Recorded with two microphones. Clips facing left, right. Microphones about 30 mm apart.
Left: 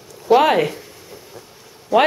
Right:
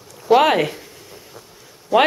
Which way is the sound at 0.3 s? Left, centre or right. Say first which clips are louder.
Even; centre.